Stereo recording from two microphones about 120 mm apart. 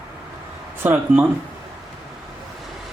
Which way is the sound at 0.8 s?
15° right (ahead or behind).